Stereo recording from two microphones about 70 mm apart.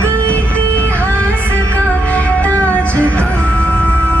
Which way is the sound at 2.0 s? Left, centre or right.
Left.